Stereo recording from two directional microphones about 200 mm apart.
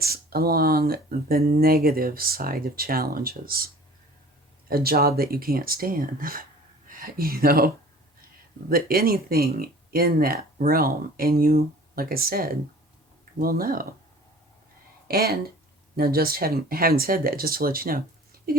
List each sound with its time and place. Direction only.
0.0 s speech: 50° right (ahead or behind)
4.7 s speech: 50° right (ahead or behind)
8.7 s speech: 50° right (ahead or behind)
15.0 s speech: 50° right (ahead or behind)